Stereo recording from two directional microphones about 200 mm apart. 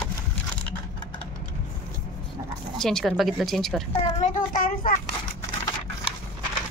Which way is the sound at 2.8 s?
Centre (ahead or behind).